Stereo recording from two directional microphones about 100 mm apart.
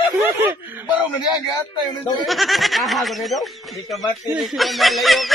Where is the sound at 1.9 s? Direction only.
50° left (ahead or behind).